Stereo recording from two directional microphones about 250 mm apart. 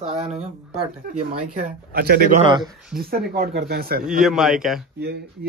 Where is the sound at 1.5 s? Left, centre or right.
Right.